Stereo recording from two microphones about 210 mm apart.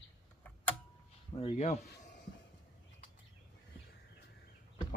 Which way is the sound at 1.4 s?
30° left (ahead or behind).